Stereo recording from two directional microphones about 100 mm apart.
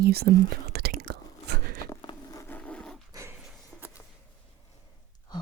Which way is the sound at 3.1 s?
30° right (ahead or behind).